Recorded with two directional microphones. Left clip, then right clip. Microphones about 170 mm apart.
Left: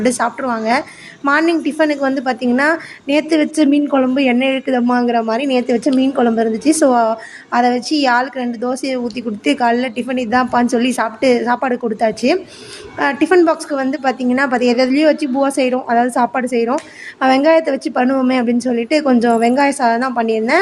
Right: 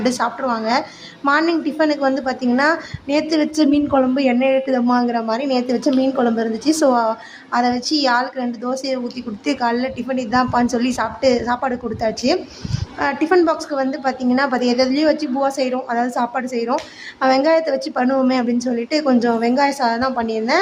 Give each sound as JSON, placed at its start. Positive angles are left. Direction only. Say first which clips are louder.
{"t": 0.0, "sound": "a woman's voice", "louder": "left 3 dB", "side_deg": 10}